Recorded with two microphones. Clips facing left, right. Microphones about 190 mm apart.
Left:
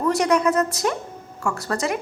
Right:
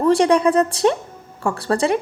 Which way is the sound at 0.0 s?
30° right (ahead or behind).